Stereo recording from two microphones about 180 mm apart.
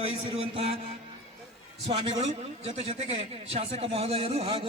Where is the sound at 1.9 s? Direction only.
35° right (ahead or behind).